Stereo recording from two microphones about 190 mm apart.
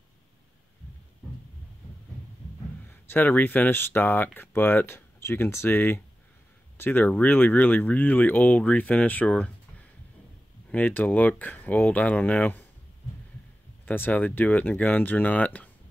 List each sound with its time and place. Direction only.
2.9 s speech: 10° left (ahead or behind)
13.8 s speech: 10° left (ahead or behind)